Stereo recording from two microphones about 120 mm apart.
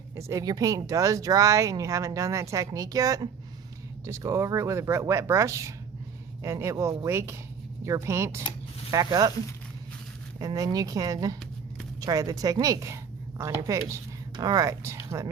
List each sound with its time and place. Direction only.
0.2 s a woman's voice: 25° right (ahead or behind)
10.4 s a woman's voice: 30° right (ahead or behind)